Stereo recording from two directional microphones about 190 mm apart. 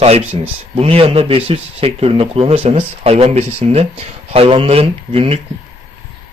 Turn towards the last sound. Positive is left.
turn(degrees=-30)  # may be behind; listen again after turning